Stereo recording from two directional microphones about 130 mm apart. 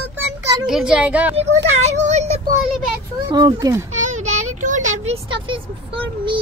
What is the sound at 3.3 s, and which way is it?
Speech, 30° right (ahead or behind).